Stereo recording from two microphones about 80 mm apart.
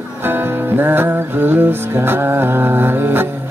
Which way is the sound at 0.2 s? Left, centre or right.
Right.